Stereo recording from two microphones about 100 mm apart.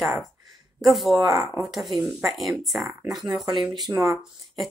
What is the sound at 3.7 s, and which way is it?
Speech, 45° right (ahead or behind).